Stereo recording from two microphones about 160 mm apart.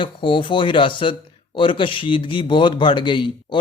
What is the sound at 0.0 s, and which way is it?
A man's voice, 30° left (ahead or behind).